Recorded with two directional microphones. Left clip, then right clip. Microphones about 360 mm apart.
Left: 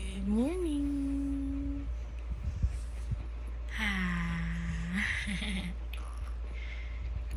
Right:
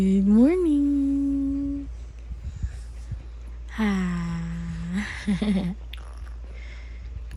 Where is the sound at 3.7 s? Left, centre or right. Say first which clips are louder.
Right 5 dB; centre.